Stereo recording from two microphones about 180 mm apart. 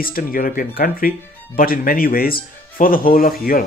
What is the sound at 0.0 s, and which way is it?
Speech, 55° left (ahead or behind).